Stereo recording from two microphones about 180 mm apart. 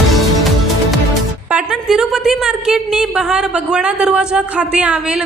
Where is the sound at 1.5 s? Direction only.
5° right (ahead or behind).